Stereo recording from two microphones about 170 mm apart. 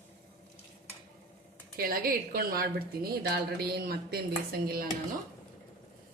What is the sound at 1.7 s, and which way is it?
A woman's voice, 60° right (ahead or behind).